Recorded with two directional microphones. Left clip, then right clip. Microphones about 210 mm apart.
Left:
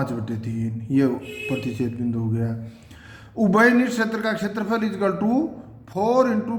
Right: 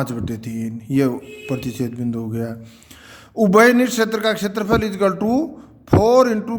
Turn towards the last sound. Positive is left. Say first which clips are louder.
# right 5 dB
turn(degrees=-50)  # may be behind; listen again after turning